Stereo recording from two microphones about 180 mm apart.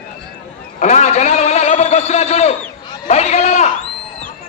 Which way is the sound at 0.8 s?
40° left (ahead or behind).